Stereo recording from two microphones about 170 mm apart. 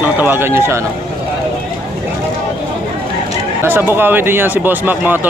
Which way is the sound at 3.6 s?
15° right (ahead or behind).